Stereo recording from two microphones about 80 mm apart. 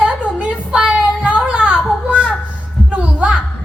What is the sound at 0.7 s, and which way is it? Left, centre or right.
Child singing, centre.